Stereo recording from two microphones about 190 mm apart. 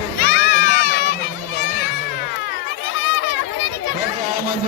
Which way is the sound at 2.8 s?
80° left.